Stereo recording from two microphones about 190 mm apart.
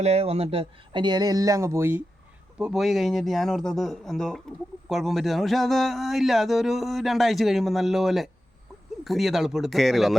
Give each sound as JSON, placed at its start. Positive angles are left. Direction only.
{"t": 0.0, "sound": "a man's voice", "side_deg": -35}